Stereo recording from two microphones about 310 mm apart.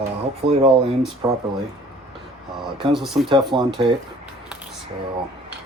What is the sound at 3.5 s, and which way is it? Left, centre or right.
Speech, centre.